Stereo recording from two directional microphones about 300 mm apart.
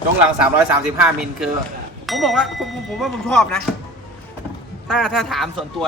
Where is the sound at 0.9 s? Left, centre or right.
Centre.